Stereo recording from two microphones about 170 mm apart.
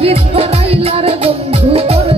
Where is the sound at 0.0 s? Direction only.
35° right (ahead or behind).